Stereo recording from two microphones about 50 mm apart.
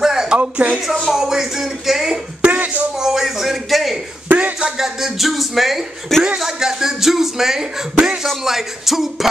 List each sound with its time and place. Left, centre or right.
0.0 s music: centre
0.4 s speech: right
1.1 s speech: centre
2.4 s a sound: right
3.0 s speech: centre
4.3 s a sound: right
4.6 s speech: centre
4.8 s speech: centre
6.1 s speech: centre
6.4 s speech: centre